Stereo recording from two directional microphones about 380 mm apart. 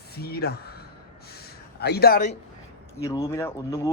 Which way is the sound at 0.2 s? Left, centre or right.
Left.